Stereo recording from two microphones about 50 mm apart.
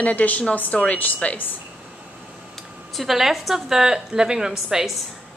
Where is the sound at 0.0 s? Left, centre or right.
Left.